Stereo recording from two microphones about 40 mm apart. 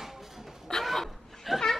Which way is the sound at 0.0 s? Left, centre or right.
Centre.